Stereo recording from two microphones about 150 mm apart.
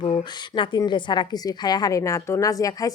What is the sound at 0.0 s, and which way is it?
A woman's voice, 35° left (ahead or behind).